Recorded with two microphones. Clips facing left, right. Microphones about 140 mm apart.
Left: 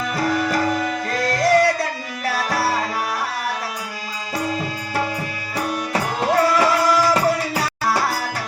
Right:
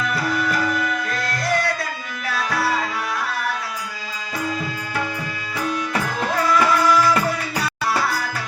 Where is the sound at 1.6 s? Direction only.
35° left (ahead or behind).